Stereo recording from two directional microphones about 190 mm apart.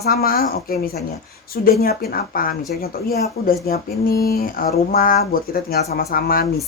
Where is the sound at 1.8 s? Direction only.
55° left (ahead or behind).